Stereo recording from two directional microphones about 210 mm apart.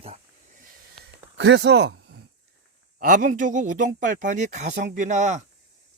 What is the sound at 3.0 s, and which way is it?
Speech, 40° right (ahead or behind).